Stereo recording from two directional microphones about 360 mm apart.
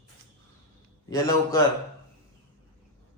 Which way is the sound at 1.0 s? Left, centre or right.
Centre.